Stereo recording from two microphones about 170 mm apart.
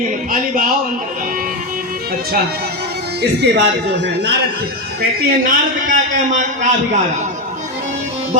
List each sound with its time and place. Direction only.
0.3 s speech: 55° right (ahead or behind)
3.2 s speech: 90° right
5.2 s a man's voice: 55° right (ahead or behind)